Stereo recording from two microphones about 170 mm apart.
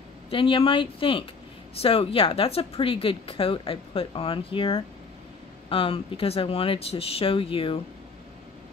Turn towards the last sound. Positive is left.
turn(degrees=30)  # may be behind; listen again after turning